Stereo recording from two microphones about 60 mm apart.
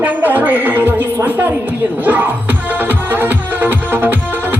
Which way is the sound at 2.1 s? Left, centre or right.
Right.